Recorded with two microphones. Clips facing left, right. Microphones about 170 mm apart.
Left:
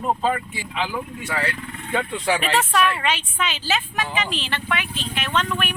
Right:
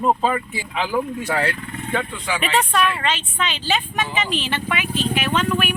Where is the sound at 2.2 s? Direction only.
45° left (ahead or behind).